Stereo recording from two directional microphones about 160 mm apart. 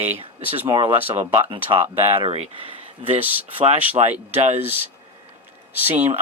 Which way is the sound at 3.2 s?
10° right (ahead or behind).